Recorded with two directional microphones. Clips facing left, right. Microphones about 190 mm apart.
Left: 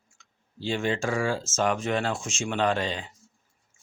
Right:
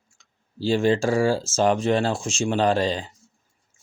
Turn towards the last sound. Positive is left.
turn(degrees=-35)  # may be behind; listen again after turning